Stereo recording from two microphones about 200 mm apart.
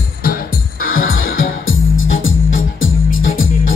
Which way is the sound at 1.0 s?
85° left.